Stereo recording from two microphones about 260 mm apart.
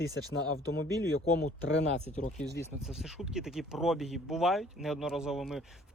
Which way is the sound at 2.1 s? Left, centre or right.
Left.